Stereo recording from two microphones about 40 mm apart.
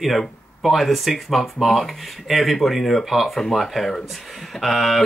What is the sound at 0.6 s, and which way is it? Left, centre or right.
Speech, centre.